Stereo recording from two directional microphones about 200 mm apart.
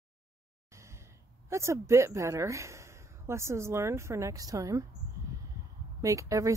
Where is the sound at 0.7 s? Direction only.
15° right (ahead or behind).